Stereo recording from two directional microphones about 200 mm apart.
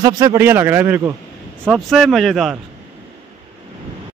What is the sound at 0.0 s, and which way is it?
Speech, 15° right (ahead or behind).